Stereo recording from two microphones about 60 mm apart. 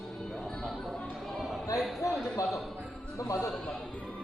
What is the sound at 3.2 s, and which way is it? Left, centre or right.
Music, left.